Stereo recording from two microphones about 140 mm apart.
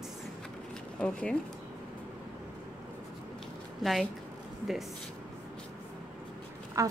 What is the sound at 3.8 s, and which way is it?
Speech, centre (ahead or behind).